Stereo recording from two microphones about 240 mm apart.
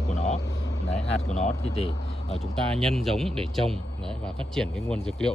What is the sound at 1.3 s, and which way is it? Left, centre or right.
Speech, left.